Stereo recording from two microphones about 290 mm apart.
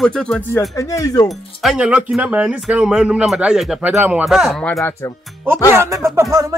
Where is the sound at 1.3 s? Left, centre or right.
Centre.